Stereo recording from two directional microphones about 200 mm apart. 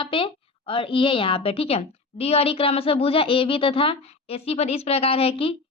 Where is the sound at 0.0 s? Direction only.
25° left (ahead or behind).